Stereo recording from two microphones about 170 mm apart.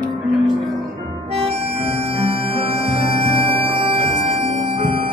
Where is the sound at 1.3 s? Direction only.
35° right (ahead or behind).